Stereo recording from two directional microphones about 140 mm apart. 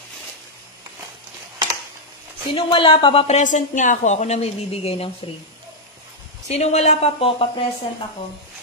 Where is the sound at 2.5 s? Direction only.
40° left (ahead or behind).